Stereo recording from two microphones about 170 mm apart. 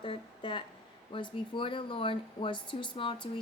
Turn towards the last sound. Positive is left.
turn(degrees=30)  # may be behind; listen again after turning